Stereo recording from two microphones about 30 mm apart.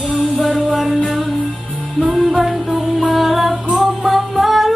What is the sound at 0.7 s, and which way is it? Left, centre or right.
Music, centre.